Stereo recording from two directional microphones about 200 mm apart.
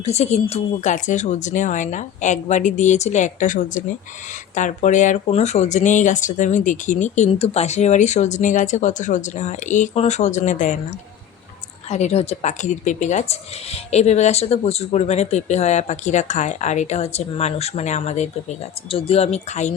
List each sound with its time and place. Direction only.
0.0 s speech: 35° left (ahead or behind)
11.9 s speech: 35° left (ahead or behind)